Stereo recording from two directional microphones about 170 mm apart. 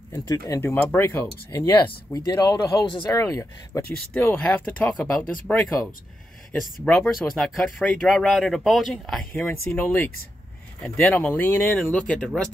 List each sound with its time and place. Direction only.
0.2 s speech: 25° left (ahead or behind)
0.6 s speech: 10° left (ahead or behind)
1.5 s speech: 25° left (ahead or behind); by 5.7 s 5° left (ahead or behind)
6.8 s speech: centre (ahead or behind)